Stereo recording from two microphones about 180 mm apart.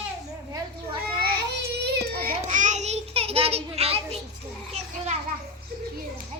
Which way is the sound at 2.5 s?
45° right (ahead or behind).